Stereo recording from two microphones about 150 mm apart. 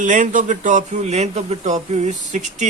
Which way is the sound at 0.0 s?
55° right (ahead or behind).